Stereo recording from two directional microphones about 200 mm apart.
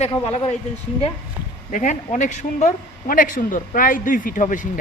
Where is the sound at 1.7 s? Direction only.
40° left (ahead or behind).